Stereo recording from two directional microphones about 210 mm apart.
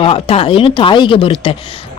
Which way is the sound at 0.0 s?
25° left (ahead or behind).